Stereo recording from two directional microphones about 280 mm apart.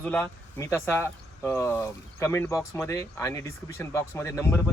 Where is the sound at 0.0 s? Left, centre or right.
Centre.